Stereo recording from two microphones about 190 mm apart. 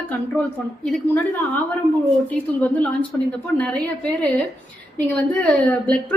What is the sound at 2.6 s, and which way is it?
Speech, 5° left (ahead or behind).